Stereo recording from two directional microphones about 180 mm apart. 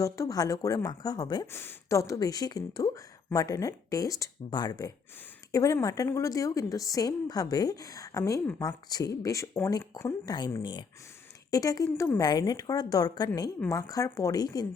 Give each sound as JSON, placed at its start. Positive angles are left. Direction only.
{"t": 0.0, "sound": "a woman's voice", "side_deg": 20}